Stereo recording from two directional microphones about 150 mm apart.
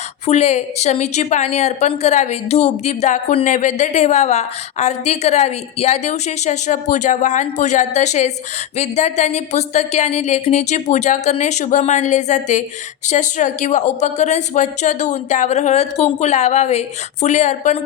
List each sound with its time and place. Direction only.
0.3 s a woman's voice: 45° left (ahead or behind)